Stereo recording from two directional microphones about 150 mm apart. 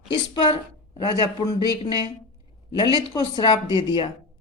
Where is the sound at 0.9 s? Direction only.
35° left (ahead or behind).